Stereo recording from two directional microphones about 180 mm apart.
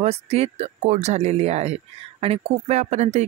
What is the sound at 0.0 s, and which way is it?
Speech, 35° right (ahead or behind).